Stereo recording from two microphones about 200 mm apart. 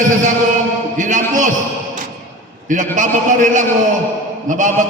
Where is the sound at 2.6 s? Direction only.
40° right (ahead or behind).